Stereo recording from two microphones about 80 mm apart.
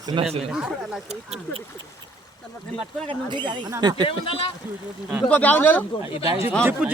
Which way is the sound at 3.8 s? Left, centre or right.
Right.